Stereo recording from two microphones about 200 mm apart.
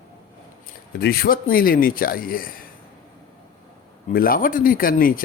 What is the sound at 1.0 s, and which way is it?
Speech, 50° left (ahead or behind).